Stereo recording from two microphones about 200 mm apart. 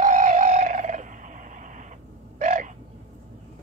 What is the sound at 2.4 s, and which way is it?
Crow, 40° right (ahead or behind).